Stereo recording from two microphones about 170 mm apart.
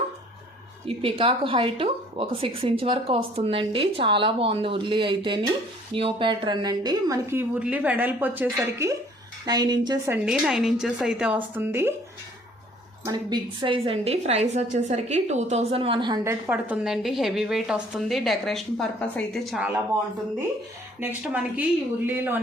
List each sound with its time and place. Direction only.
0.9 s a woman's voice: 35° right (ahead or behind)
10.1 s a woman's voice: 5° right (ahead or behind)
13.1 s a woman's voice: 25° right (ahead or behind); by 19.6 s centre (ahead or behind)
21.0 s a woman's voice: 10° right (ahead or behind)